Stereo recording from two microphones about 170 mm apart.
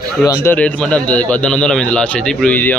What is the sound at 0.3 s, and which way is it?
Speech, 15° left (ahead or behind).